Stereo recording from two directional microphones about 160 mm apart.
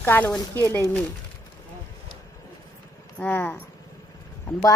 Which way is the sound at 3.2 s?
10° left (ahead or behind).